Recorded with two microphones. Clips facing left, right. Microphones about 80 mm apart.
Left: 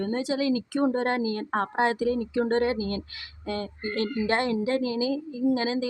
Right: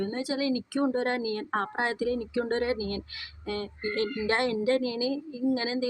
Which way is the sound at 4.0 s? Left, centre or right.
Left.